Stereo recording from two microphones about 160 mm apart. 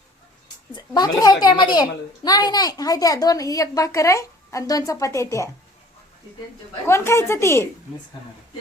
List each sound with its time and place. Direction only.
0.7 s a woman's voice: 25° left (ahead or behind)
6.8 s a woman's voice: 15° left (ahead or behind)